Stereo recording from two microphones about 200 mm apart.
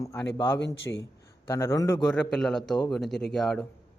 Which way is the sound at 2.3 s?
5° left (ahead or behind).